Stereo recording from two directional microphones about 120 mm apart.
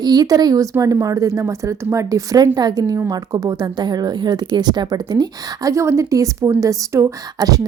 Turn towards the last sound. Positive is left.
turn(degrees=-30)  # may be behind; listen again after turning